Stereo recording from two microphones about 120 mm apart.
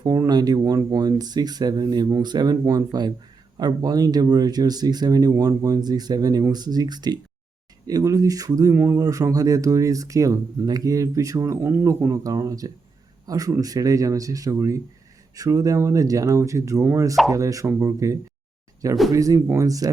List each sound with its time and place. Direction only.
0.0 s speech: 30° right (ahead or behind)
8.7 s speech: 15° right (ahead or behind)
9.0 s speech: 30° right (ahead or behind)